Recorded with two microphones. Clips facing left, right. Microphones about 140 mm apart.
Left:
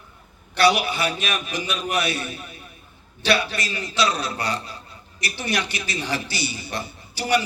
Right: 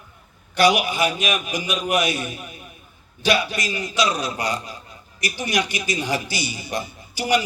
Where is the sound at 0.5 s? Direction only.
15° right (ahead or behind).